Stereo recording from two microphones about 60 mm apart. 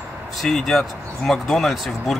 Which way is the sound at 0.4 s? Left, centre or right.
Centre.